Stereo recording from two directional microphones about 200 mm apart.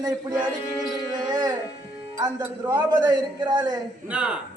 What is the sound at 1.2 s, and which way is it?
Speech, 20° right (ahead or behind).